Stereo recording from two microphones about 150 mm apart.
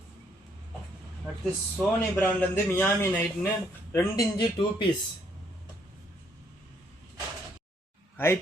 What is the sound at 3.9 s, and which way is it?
Speech, 25° left (ahead or behind).